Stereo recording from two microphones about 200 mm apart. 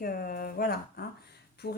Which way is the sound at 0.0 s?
45° left (ahead or behind).